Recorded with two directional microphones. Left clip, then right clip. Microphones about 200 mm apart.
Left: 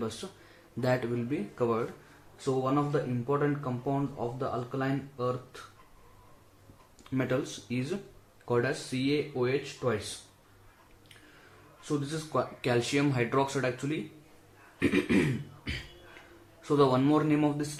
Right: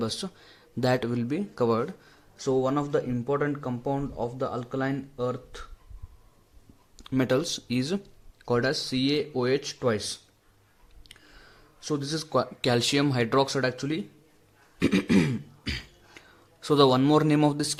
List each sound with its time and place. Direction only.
0.8 s speech: 45° right (ahead or behind)
2.4 s speech: 35° right (ahead or behind)
7.0 s speech: 50° right (ahead or behind)
11.9 s speech: 45° right (ahead or behind)
14.8 s a sound: 50° right (ahead or behind)
16.6 s speech: 45° right (ahead or behind)